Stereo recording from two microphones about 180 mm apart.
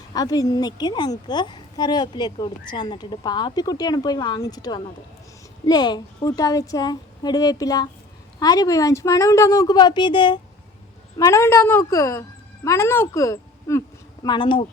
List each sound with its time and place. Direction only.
0.1 s a woman's voice: 20° left (ahead or behind)